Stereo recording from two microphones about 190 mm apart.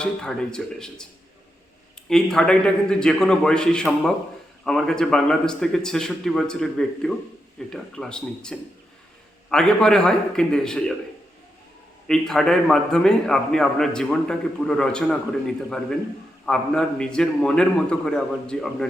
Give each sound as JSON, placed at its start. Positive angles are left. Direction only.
{"t": 0.0, "sound": "a man's voice", "side_deg": 5}
{"t": 2.0, "sound": "a man's voice", "side_deg": 5}
{"t": 12.0, "sound": "a man's voice", "side_deg": 5}